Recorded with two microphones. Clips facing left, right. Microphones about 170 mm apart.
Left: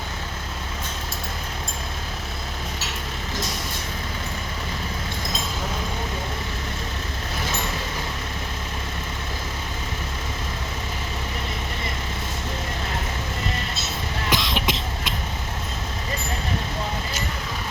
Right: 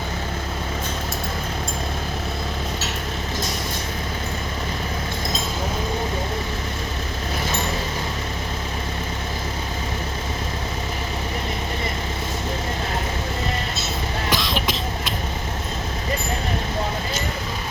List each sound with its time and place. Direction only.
14.3 s cough: 20° left (ahead or behind)